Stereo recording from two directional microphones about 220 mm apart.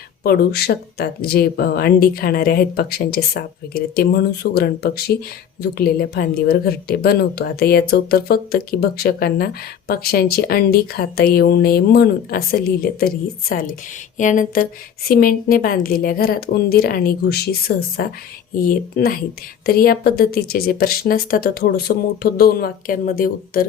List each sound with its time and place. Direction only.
0.2 s a woman's voice: 45° left (ahead or behind)